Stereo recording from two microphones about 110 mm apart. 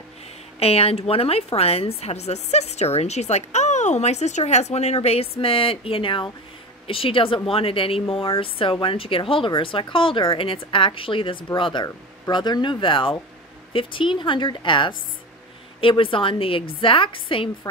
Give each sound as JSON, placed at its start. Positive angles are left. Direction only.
{"t": 0.6, "sound": "a woman's voice", "side_deg": 65}